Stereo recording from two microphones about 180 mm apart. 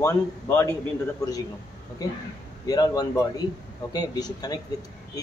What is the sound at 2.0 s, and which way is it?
Speech, 20° left (ahead or behind).